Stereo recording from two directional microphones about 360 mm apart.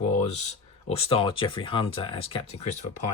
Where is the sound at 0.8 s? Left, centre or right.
Centre.